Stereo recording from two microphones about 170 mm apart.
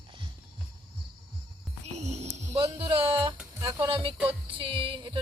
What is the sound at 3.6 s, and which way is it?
Speech, 20° right (ahead or behind).